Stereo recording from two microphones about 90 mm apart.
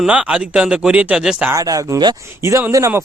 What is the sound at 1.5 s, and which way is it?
Speech, 40° right (ahead or behind).